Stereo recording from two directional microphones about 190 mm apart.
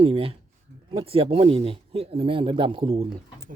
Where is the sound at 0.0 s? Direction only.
30° right (ahead or behind).